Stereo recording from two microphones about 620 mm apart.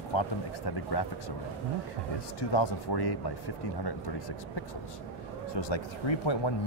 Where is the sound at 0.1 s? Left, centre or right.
Left.